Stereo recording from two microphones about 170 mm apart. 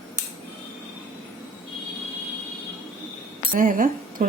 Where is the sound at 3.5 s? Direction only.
50° right (ahead or behind).